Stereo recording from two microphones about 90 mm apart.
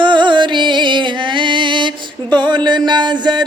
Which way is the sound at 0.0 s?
60° right (ahead or behind).